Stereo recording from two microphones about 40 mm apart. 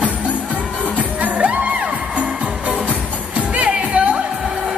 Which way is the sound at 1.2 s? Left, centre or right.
Right.